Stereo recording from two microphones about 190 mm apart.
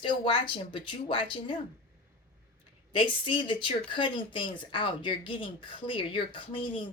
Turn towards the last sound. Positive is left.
turn(degrees=25)  # may be behind; listen again after turning